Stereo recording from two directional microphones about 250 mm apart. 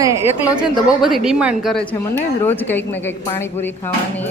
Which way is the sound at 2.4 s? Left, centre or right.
Centre.